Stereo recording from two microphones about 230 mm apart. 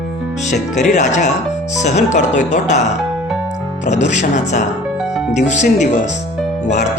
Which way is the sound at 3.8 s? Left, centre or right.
Left.